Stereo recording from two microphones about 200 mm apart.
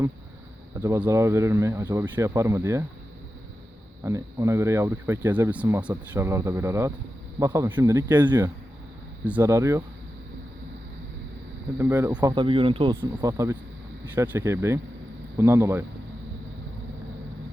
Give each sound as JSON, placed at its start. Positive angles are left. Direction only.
{"t": 0.8, "sound": "speech", "side_deg": -10}
{"t": 4.0, "sound": "speech", "side_deg": -15}
{"t": 11.8, "sound": "speech", "side_deg": -15}